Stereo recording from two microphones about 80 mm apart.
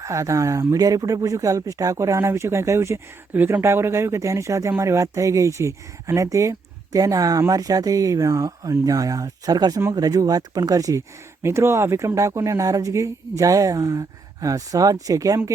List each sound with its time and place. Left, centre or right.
0.0 s speech: right
11.4 s speech: right